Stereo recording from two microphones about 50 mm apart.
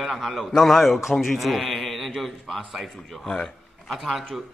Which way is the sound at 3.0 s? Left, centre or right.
Centre.